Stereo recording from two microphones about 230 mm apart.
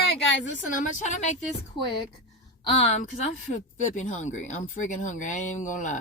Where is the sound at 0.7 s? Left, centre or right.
Left.